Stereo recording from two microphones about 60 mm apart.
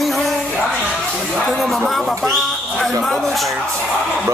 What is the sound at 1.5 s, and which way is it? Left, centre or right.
Speech, centre.